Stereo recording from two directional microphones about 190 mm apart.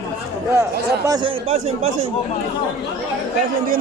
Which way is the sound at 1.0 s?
25° right (ahead or behind).